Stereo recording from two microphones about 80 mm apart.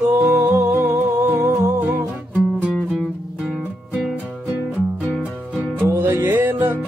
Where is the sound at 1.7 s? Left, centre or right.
Right.